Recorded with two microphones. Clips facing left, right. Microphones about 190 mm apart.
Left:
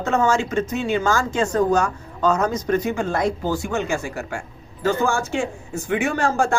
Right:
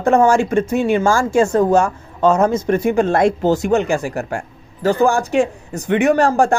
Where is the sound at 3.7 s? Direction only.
65° right (ahead or behind).